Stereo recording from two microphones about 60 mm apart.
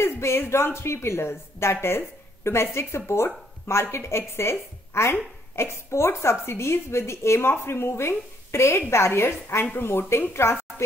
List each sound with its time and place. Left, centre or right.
0.0 s speech: left